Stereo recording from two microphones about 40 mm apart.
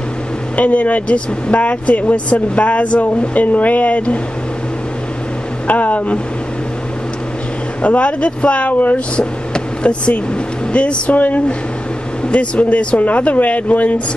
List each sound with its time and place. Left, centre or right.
0.6 s speech: left
5.7 s speech: left
7.8 s speech: left
8.9 s speech: left
11.1 s speech: left
12.3 s speech: left